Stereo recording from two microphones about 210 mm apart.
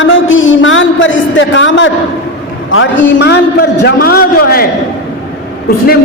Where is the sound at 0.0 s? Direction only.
65° left (ahead or behind); by 4.6 s 45° left (ahead or behind).